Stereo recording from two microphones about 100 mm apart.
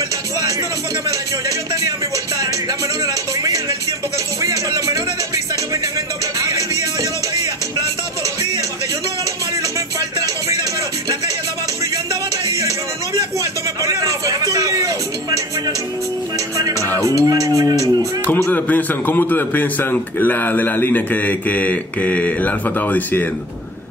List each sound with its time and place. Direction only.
4.4 s music: 35° right (ahead or behind)
9.6 s music: 40° right (ahead or behind)
12.5 s a sound: 35° right (ahead or behind)
16.5 s music: 35° right (ahead or behind)
18.2 s a man's voice: 20° left (ahead or behind)